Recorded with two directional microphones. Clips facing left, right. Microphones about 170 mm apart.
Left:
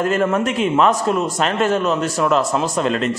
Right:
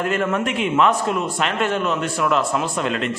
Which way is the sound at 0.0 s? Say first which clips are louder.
Left 3 dB; 40° left (ahead or behind).